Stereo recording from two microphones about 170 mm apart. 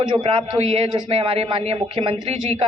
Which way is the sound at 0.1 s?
30° right (ahead or behind).